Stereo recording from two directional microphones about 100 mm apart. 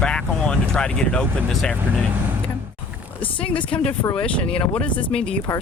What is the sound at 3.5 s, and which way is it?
Speech, 60° left (ahead or behind).